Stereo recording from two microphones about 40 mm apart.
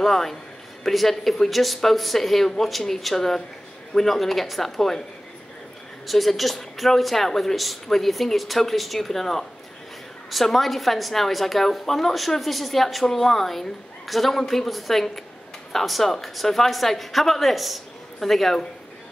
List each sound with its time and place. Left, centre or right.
0.0 s a man's voice: centre
6.0 s speech: centre